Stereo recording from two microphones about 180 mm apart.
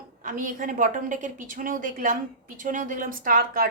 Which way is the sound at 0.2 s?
50° right (ahead or behind).